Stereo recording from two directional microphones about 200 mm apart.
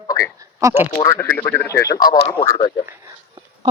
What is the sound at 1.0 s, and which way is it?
Speech, 15° left (ahead or behind).